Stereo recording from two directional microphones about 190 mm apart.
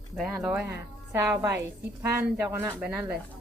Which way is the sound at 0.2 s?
Centre (ahead or behind).